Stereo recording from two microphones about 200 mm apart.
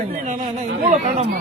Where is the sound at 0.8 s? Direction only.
35° right (ahead or behind).